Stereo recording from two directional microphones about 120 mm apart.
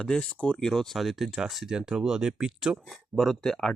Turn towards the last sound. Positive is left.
turn(degrees=5)  # may be behind; listen again after turning